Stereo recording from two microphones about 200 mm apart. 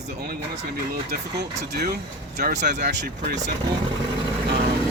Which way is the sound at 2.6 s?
40° right (ahead or behind).